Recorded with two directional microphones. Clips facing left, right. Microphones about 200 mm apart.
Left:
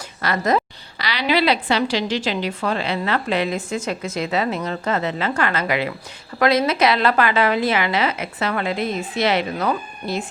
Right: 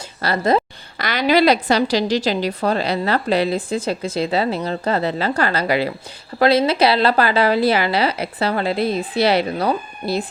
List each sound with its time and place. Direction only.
0.2 s a woman's voice: 30° right (ahead or behind)
0.9 s a woman's voice: 50° right (ahead or behind)